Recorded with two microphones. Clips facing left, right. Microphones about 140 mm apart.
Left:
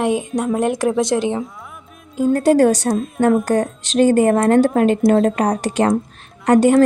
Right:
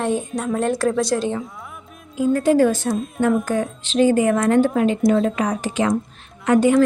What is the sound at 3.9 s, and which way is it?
Speech, 55° left (ahead or behind).